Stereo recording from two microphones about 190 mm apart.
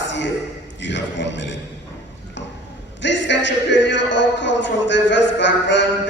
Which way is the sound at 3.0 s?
70° left (ahead or behind).